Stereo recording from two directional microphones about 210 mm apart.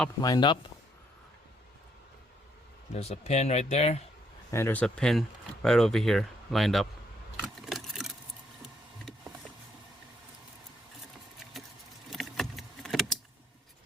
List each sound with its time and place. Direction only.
0.2 s speech: 20° left (ahead or behind)
2.9 s speech: 30° left (ahead or behind)
4.5 s speech: 10° left (ahead or behind)
7.4 s a sound: centre (ahead or behind)
12.1 s vehicle: centre (ahead or behind)